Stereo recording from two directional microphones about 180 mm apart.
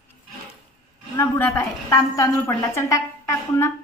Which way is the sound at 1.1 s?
10° left (ahead or behind).